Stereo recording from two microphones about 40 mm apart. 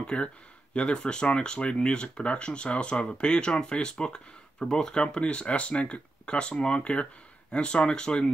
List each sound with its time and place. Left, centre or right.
0.0 s speech: left